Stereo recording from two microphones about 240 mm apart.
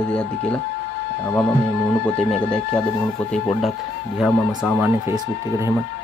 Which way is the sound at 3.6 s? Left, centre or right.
Centre.